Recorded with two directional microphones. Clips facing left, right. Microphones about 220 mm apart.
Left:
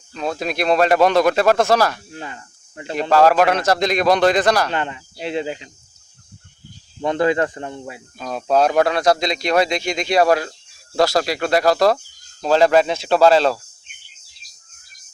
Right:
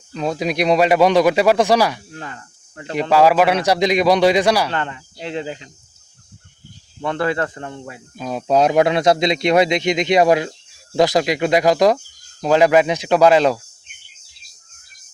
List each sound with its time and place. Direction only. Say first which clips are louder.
0.1 s speech: right 3 dB; 15° right (ahead or behind)
2.1 s speech: even; 15° left (ahead or behind)
3.0 s speech: even; 10° right (ahead or behind)
4.7 s speech: left 1 dB; 15° left (ahead or behind)
7.0 s speech: left 3 dB; 20° left (ahead or behind)
8.2 s speech: right 1 dB; 10° right (ahead or behind)